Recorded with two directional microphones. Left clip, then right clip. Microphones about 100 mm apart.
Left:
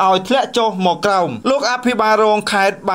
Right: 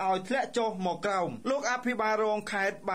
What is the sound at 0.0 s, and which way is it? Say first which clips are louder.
Speech: left 15 dB; 25° left (ahead or behind).